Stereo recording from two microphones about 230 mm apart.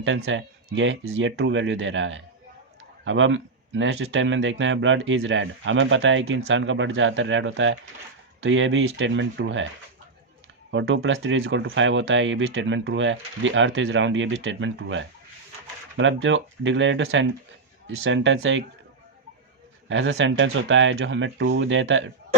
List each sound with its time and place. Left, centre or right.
0.0 s speech: right
10.7 s speech: right
19.9 s speech: right